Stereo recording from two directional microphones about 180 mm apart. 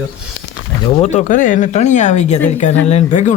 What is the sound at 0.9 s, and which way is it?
Speech, 35° left (ahead or behind).